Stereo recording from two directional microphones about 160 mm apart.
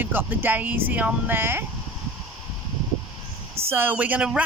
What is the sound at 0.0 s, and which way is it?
Speech, 15° right (ahead or behind).